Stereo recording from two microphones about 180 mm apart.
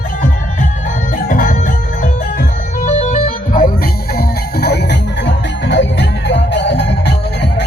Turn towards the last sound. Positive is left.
turn(degrees=70)  # may be behind; listen again after turning